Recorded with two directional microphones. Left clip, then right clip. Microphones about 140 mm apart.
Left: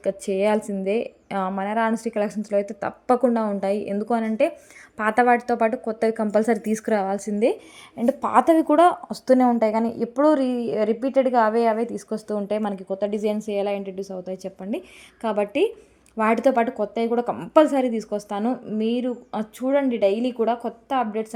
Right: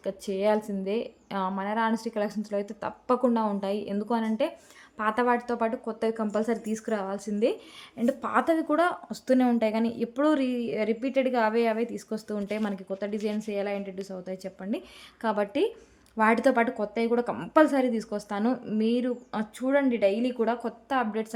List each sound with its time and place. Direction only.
0.0 s a woman's voice: 30° left (ahead or behind); by 21.2 s 5° left (ahead or behind)